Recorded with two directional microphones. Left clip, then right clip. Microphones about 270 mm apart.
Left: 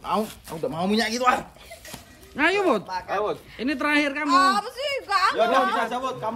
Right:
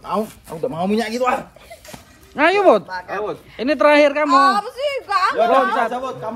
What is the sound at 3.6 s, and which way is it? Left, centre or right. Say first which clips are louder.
Speech: right 11 dB; centre.